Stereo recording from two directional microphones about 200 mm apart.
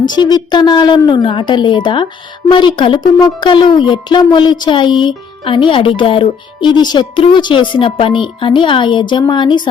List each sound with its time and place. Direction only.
0.1 s speech: 20° left (ahead or behind)